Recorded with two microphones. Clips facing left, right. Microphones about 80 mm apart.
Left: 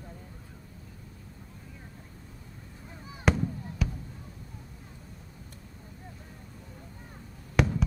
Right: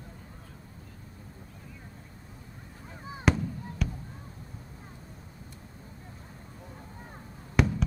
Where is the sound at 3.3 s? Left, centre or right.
Centre.